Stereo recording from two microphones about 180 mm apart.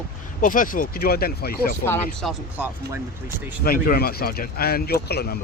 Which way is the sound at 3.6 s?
55° left (ahead or behind).